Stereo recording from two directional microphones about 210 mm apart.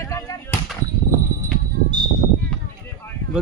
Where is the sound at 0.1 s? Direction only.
15° left (ahead or behind).